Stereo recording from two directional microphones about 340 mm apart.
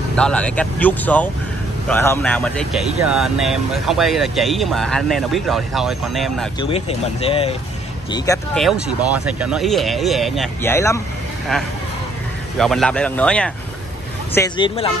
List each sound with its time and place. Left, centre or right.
0.1 s speech: centre
6.6 s speech: centre
8.1 s speech: centre
12.5 s speech: centre